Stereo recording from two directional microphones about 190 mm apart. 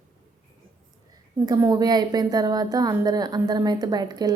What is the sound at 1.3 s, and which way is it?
A woman's voice, 15° right (ahead or behind).